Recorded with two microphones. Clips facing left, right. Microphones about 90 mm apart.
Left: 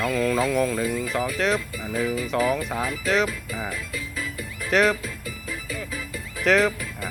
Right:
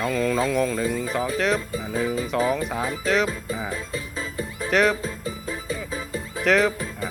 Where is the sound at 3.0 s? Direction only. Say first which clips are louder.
Right 1 dB; centre (ahead or behind).